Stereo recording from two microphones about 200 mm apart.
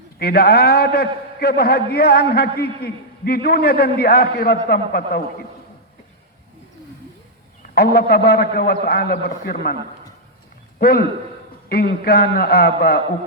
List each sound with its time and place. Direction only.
0.2 s a man's voice: 50° left (ahead or behind)
7.8 s a man's voice: 50° left (ahead or behind)
10.8 s a man's voice: 50° left (ahead or behind)